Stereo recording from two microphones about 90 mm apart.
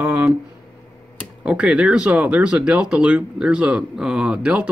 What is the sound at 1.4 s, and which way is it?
Speech, 10° right (ahead or behind).